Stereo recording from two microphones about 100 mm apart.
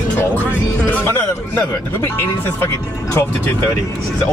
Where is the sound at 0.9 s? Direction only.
20° left (ahead or behind).